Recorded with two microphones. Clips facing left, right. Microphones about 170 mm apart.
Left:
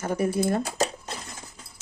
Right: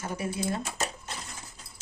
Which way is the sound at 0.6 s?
35° left (ahead or behind).